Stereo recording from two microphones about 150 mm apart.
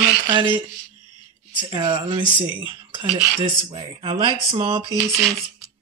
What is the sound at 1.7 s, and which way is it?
Speech, 30° right (ahead or behind).